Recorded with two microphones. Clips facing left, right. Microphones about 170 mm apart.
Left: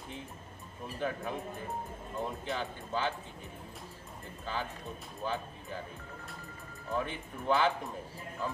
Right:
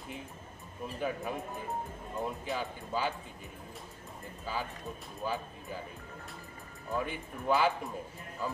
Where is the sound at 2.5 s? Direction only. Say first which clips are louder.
Even; 10° right (ahead or behind).